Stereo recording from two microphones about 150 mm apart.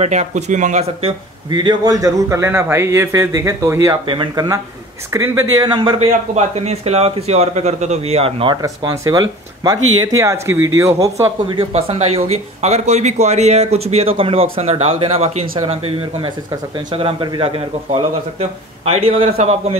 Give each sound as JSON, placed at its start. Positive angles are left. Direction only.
{"t": 0.0, "sound": "speech", "side_deg": -50}
{"t": 1.5, "sound": "speech", "side_deg": -30}
{"t": 4.1, "sound": "a man's voice", "side_deg": -35}
{"t": 5.1, "sound": "speech", "side_deg": -20}
{"t": 5.9, "sound": "speech", "side_deg": -45}
{"t": 8.6, "sound": "speech", "side_deg": -25}
{"t": 11.4, "sound": "a man's voice", "side_deg": -40}